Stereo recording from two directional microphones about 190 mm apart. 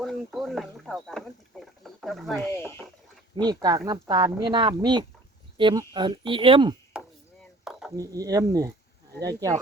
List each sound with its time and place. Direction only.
0.0 s speech: centre (ahead or behind)
2.5 s speech: 15° left (ahead or behind)
3.3 s speech: 20° right (ahead or behind)
6.9 s chop: 5° right (ahead or behind)
7.6 s dishes: 5° right (ahead or behind)
7.9 s speech: 20° right (ahead or behind)